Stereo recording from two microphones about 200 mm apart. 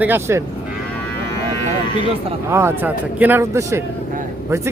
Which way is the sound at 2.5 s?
10° right (ahead or behind).